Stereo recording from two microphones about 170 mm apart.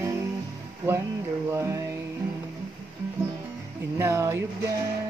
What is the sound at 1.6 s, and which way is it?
Music, 15° right (ahead or behind).